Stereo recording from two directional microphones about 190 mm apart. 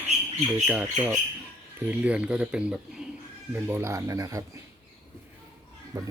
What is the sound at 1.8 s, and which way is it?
Speech, 5° right (ahead or behind).